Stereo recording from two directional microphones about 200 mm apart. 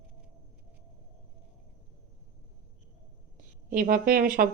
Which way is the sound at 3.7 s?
45° right (ahead or behind).